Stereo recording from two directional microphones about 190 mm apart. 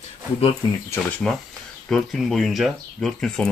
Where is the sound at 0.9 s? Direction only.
10° left (ahead or behind).